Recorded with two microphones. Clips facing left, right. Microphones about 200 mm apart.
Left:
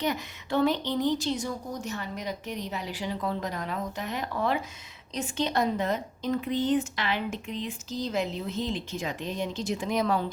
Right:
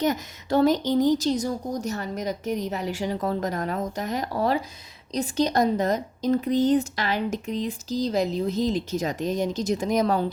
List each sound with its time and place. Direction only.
0.0 s speech: 40° right (ahead or behind)